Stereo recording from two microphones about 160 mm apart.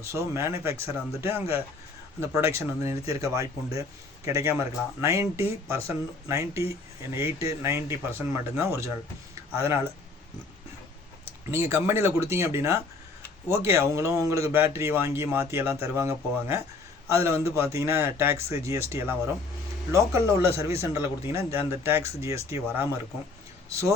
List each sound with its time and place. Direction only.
0.0 s speech: 15° right (ahead or behind)
11.3 s speech: 15° right (ahead or behind)